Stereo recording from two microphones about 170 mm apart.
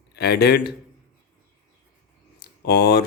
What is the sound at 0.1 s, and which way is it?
Speech, 70° left (ahead or behind).